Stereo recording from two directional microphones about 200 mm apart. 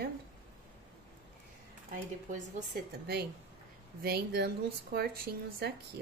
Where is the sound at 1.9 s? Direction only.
45° right (ahead or behind).